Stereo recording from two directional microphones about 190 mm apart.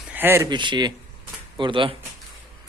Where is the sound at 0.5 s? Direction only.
25° right (ahead or behind).